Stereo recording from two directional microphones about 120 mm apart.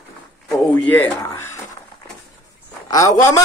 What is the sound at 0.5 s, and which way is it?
Speech, 20° left (ahead or behind).